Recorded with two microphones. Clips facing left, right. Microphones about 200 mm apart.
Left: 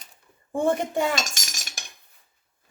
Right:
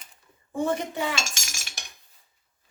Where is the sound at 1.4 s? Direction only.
40° left (ahead or behind).